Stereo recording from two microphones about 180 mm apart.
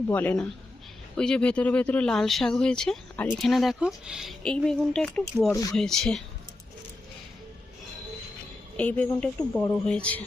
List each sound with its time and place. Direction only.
0.1 s a woman's voice: 10° left (ahead or behind)
5.5 s speech: 20° left (ahead or behind)
5.7 s speech: 5° left (ahead or behind)
8.7 s a woman's voice: 10° left (ahead or behind)